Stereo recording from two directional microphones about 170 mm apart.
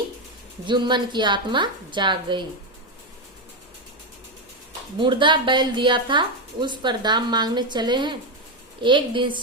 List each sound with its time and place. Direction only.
0.6 s a woman's voice: 25° right (ahead or behind)
4.9 s a woman's voice: 30° right (ahead or behind)